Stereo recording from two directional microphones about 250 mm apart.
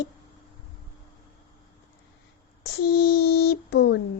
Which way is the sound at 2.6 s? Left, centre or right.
Left.